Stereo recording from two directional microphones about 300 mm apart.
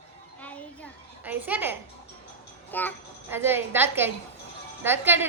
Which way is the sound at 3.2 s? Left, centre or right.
Centre.